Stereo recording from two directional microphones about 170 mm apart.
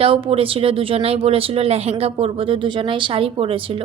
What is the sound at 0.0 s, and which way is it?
A woman's voice, 35° right (ahead or behind).